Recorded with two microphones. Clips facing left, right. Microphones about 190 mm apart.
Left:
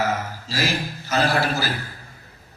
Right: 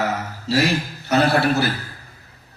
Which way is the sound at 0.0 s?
65° right (ahead or behind).